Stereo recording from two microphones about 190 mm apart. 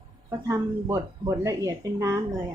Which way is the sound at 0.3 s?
15° right (ahead or behind).